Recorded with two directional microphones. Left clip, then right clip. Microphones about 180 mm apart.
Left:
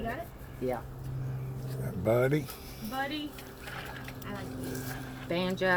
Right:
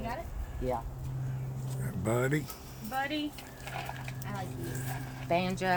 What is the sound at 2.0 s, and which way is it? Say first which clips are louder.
Speech: left 4 dB; 10° right (ahead or behind).